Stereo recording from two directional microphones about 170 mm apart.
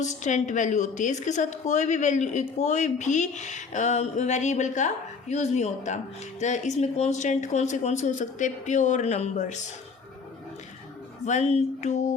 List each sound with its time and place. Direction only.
0.0 s a woman's voice: 45° left (ahead or behind)
11.3 s a woman's voice: 40° left (ahead or behind)